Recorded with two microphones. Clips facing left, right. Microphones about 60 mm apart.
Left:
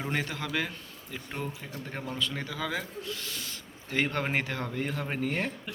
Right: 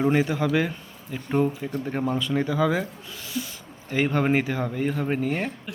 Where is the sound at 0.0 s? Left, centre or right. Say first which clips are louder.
Right 11 dB; centre.